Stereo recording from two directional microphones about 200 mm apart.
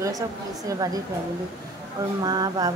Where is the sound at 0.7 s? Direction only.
20° right (ahead or behind).